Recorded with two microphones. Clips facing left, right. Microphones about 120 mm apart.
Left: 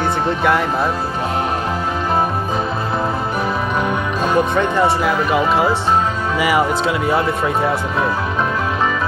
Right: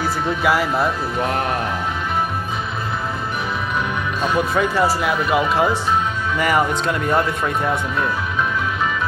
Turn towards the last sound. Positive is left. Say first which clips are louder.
# left 3 dB
turn(degrees=5)  # may be behind; listen again after turning